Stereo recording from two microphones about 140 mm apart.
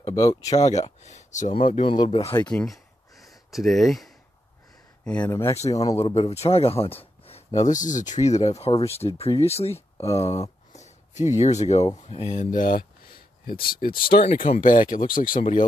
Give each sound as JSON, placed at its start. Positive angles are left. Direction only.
{"t": 0.1, "sound": "speech", "side_deg": 25}
{"t": 0.6, "sound": "speech", "side_deg": 55}
{"t": 1.7, "sound": "speech", "side_deg": 40}
{"t": 2.5, "sound": "a sound", "side_deg": 0}
{"t": 5.2, "sound": "speech", "side_deg": 20}
{"t": 5.9, "sound": "speech", "side_deg": 45}
{"t": 13.5, "sound": "speech", "side_deg": 90}
{"t": 14.4, "sound": "speech", "side_deg": 70}